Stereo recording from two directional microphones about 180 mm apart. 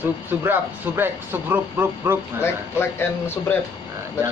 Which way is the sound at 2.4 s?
10° left (ahead or behind).